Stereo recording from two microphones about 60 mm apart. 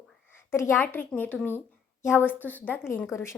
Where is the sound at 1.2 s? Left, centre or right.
Left.